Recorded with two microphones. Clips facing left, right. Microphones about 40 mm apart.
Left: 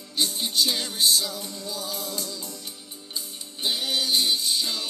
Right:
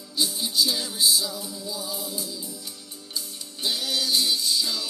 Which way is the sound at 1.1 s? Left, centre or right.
Left.